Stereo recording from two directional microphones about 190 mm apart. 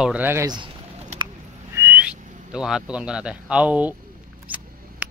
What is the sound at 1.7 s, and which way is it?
Speech, 10° right (ahead or behind).